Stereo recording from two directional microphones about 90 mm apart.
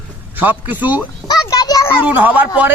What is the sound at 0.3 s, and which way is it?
Speech, 20° right (ahead or behind).